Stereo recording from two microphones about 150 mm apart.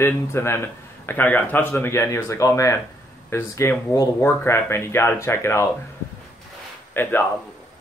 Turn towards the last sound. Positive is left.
turn(degrees=15)  # may be behind; listen again after turning